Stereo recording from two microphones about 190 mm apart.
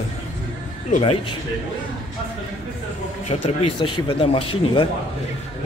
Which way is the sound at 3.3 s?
25° left (ahead or behind).